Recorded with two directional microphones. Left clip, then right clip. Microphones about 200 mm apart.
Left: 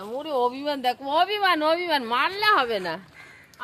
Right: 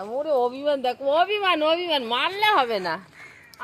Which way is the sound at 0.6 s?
90° left.